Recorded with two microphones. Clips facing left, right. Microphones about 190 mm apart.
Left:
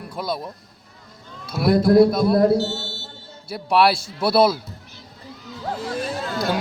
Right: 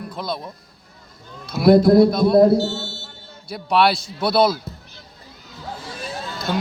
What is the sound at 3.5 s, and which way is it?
Speech, 5° left (ahead or behind).